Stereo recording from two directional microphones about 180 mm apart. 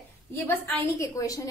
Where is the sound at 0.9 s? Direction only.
20° left (ahead or behind).